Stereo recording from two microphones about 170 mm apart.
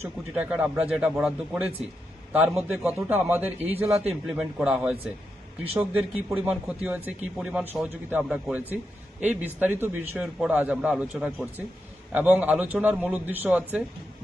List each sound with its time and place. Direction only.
0.0 s speech: 10° right (ahead or behind)